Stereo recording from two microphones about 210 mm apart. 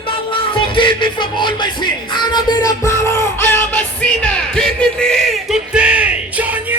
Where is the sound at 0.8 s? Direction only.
25° left (ahead or behind).